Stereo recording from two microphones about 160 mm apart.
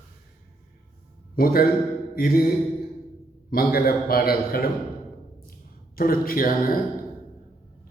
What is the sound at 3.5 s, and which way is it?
A man's voice, 65° left (ahead or behind).